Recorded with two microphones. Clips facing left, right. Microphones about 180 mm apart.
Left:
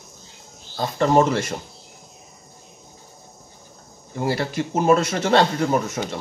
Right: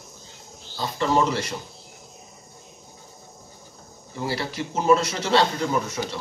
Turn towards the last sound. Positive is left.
turn(degrees=50)  # may be behind; listen again after turning